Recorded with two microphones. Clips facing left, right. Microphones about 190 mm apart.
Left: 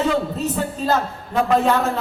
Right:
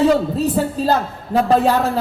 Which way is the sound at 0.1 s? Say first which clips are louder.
Right 5 dB; 40° right (ahead or behind).